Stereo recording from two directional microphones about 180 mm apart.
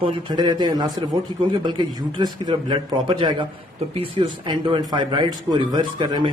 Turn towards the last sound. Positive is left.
turn(degrees=-25)  # may be behind; listen again after turning